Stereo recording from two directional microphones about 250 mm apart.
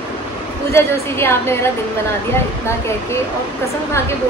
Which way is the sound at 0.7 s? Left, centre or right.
Centre.